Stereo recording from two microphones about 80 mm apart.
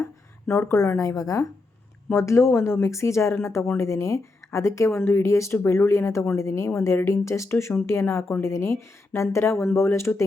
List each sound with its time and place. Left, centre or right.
0.0 s speech: left
2.1 s speech: left